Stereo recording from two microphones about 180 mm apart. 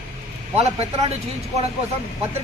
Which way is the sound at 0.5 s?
35° right (ahead or behind).